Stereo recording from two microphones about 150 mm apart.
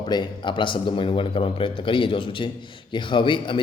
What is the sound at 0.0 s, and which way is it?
A man's voice, 30° left (ahead or behind).